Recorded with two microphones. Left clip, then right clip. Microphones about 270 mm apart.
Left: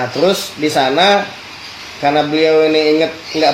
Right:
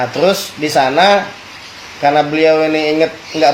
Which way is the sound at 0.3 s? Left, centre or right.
Right.